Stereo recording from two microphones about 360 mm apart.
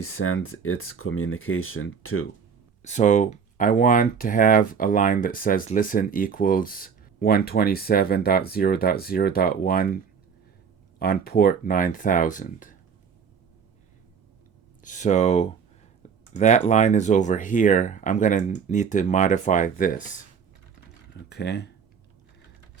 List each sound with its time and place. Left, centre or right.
0.2 s speech: left
2.8 s speech: centre
11.0 s speech: left
14.8 s speech: left
21.1 s speech: left